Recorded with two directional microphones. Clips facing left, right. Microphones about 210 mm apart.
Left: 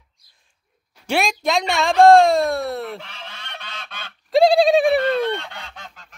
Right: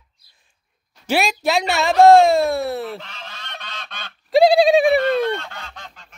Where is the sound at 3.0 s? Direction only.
10° left (ahead or behind).